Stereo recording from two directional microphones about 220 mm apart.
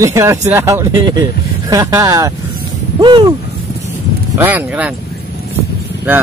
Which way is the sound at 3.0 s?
20° right (ahead or behind).